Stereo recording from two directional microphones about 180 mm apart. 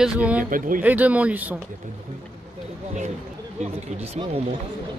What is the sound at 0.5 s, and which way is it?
Speech, 50° right (ahead or behind).